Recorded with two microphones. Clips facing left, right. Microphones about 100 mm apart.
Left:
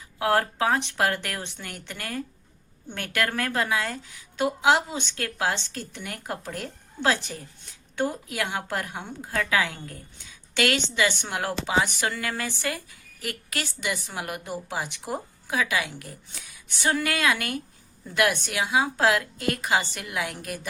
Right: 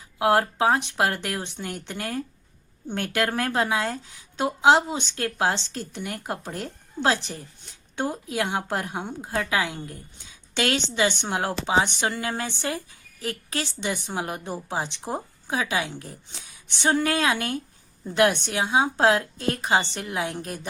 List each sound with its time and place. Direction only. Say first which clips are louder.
0.2 s a woman's voice: right 3 dB; 20° right (ahead or behind)